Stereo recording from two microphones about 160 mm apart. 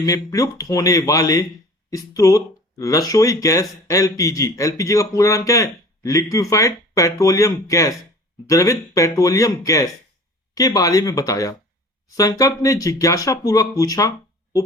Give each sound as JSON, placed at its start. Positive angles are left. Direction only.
{"t": 0.0, "sound": "speech", "side_deg": 20}